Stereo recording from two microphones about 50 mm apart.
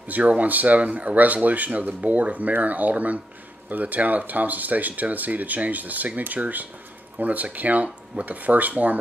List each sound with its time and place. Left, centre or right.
0.2 s speech: right